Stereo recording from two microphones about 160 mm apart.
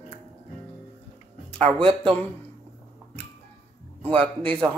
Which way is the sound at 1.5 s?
35° right (ahead or behind).